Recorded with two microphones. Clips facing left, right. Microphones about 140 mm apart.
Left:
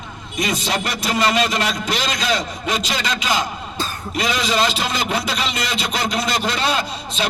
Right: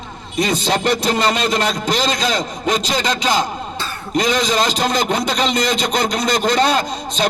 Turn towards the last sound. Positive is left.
turn(degrees=-40)  # may be behind; listen again after turning